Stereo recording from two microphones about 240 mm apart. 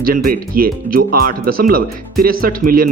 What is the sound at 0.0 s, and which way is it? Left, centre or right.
Speech, right.